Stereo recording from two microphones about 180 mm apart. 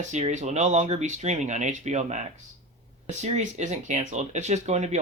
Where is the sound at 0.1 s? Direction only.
40° right (ahead or behind).